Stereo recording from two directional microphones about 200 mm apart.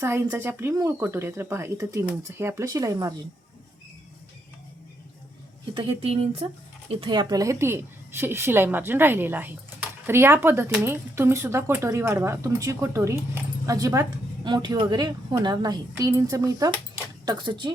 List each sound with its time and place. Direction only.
0.0 s a woman's voice: 10° right (ahead or behind)
5.7 s a woman's voice: 30° right (ahead or behind)